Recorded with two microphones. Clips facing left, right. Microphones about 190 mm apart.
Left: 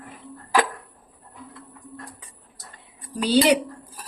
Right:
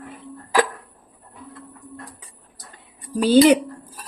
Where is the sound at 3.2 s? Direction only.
45° right (ahead or behind).